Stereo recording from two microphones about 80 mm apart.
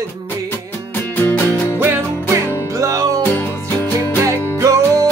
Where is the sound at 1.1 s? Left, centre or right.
Left.